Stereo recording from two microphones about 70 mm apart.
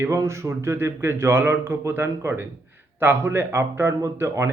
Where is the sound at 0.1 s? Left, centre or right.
Right.